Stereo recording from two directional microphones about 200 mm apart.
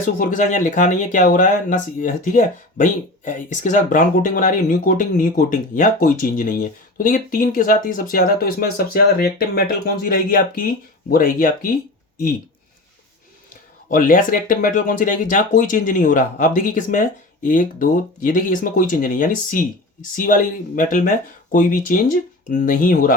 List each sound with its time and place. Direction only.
0.0 s speech: 40° left (ahead or behind)
13.9 s speech: 40° left (ahead or behind)